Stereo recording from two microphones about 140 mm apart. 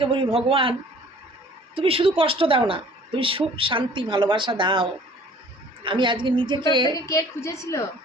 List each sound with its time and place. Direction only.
0.0 s a woman's voice: 40° right (ahead or behind)
6.8 s a woman's voice: 25° left (ahead or behind)